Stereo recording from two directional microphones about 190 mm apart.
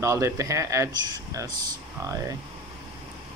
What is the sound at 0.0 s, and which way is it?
Speech, 15° right (ahead or behind).